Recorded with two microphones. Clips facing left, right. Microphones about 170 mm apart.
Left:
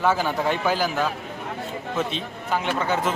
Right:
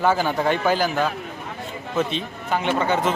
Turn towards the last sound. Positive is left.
turn(degrees=5)  # may be behind; listen again after turning